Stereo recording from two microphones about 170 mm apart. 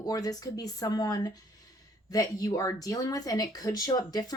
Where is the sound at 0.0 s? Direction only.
20° left (ahead or behind).